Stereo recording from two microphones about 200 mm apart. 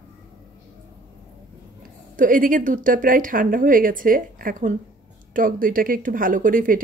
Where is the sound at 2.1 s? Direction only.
45° right (ahead or behind).